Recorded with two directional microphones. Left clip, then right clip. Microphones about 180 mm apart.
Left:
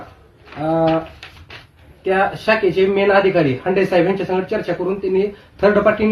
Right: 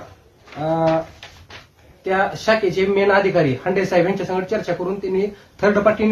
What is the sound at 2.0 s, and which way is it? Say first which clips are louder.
Speech: left 2 dB; 15° right (ahead or behind).